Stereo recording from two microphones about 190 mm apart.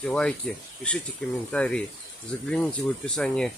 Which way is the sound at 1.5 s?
5° left (ahead or behind).